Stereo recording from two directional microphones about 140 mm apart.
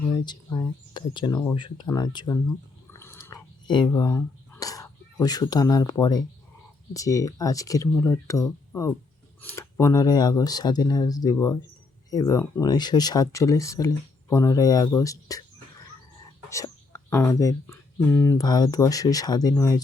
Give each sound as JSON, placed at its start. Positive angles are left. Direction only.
{"t": 0.3, "sound": "speech", "side_deg": 30}
{"t": 1.9, "sound": "a sound", "side_deg": 30}
{"t": 3.7, "sound": "speech", "side_deg": 30}
{"t": 16.5, "sound": "speech", "side_deg": 20}